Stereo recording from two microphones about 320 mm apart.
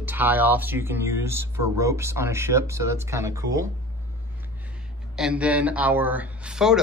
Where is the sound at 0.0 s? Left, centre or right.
Centre.